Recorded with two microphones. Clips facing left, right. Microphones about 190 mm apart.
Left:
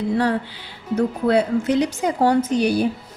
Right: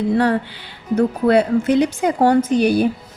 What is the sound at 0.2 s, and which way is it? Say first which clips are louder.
A woman's voice: right 3 dB; 60° right (ahead or behind).